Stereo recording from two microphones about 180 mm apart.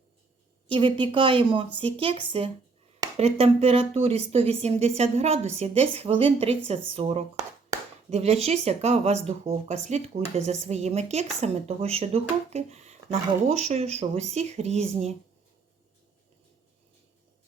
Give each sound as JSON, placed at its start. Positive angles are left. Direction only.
{"t": 0.7, "sound": "speech", "side_deg": -30}